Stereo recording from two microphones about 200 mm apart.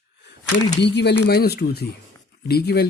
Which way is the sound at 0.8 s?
60° left (ahead or behind).